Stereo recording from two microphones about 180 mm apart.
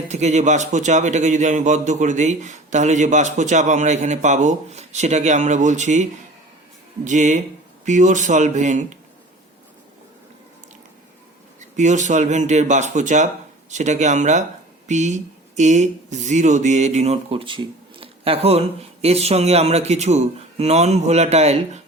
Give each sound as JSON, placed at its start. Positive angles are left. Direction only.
{"t": 0.1, "sound": "speech", "side_deg": -40}
{"t": 11.8, "sound": "speech", "side_deg": -40}